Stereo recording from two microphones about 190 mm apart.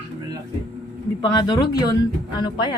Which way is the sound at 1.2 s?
20° left (ahead or behind).